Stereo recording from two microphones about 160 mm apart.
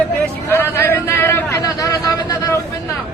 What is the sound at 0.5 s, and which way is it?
A man's voice, 15° left (ahead or behind).